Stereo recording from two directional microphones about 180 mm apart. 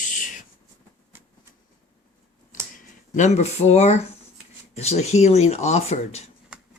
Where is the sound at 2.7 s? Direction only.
40° left (ahead or behind).